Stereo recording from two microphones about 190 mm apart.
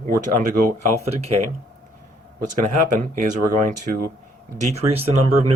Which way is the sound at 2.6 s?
45° right (ahead or behind).